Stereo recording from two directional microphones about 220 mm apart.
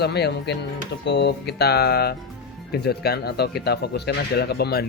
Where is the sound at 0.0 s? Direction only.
50° left (ahead or behind).